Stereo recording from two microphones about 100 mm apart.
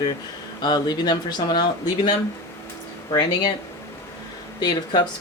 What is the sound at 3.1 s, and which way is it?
Speech, 45° left (ahead or behind).